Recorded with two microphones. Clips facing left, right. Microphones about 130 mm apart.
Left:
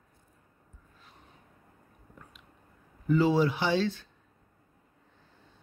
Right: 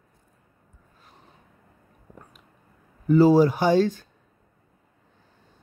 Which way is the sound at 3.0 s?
40° right (ahead or behind).